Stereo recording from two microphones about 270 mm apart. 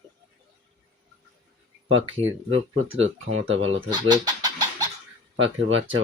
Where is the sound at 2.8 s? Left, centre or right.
Right.